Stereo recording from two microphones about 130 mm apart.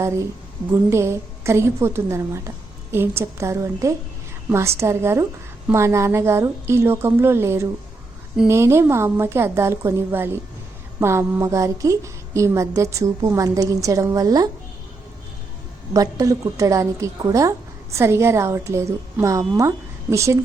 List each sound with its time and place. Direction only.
0.7 s a woman's voice: 20° right (ahead or behind)
15.9 s a woman's voice: 25° right (ahead or behind)